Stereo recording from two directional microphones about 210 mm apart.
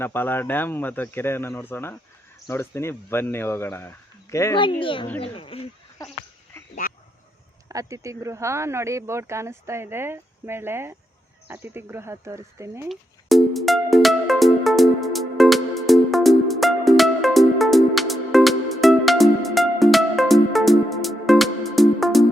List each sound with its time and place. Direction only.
0.0 s speech: 10° left (ahead or behind); by 5.6 s 25° left (ahead or behind)
7.7 s speech: 15° right (ahead or behind)
12.9 s music: centre (ahead or behind)